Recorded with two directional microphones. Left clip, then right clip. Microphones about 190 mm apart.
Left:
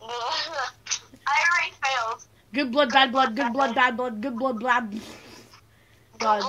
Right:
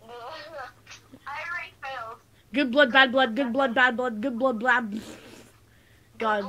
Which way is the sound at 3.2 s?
35° left (ahead or behind).